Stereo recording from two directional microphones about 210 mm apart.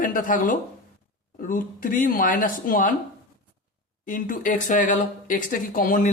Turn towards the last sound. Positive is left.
turn(degrees=40)  # may be behind; listen again after turning